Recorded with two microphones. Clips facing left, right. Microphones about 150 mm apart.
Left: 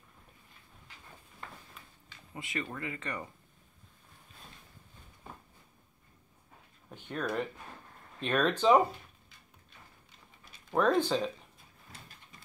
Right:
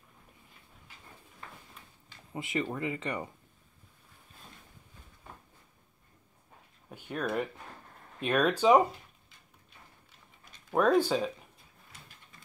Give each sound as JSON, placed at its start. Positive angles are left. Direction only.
{"t": 2.3, "sound": "speech", "side_deg": -25}
{"t": 6.9, "sound": "a sound", "side_deg": -10}
{"t": 8.2, "sound": "speech", "side_deg": -10}
{"t": 10.7, "sound": "speech", "side_deg": -10}